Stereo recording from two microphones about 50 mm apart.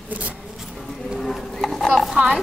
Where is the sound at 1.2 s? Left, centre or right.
Centre.